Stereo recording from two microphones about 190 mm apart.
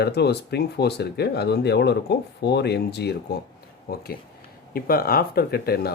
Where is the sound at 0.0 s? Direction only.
60° left (ahead or behind).